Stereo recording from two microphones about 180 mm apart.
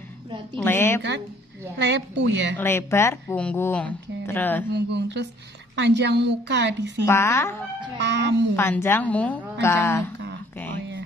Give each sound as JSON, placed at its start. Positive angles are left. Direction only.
{"t": 0.7, "sound": "speech", "side_deg": 10}
{"t": 1.8, "sound": "a woman's voice", "side_deg": -75}
{"t": 2.5, "sound": "speech", "side_deg": 15}
{"t": 4.7, "sound": "a woman's voice", "side_deg": -70}
{"t": 7.1, "sound": "speech", "side_deg": 15}
{"t": 8.0, "sound": "a woman's voice", "side_deg": -70}
{"t": 8.5, "sound": "speech", "side_deg": 15}